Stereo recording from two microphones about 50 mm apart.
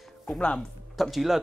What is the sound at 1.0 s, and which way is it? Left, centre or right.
Speech, centre.